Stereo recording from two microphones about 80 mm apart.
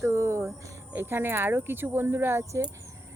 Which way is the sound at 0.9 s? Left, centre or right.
Right.